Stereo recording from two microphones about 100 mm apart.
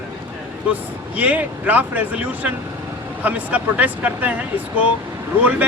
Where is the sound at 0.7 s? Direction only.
15° right (ahead or behind).